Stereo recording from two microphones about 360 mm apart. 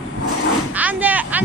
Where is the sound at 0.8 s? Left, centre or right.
Centre.